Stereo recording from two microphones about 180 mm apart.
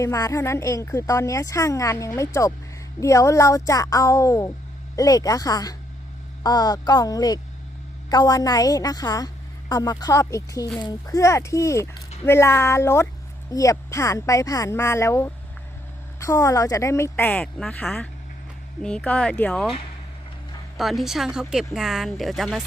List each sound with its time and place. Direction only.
0.0 s a woman's voice: 20° left (ahead or behind)
20.7 s speech: centre (ahead or behind)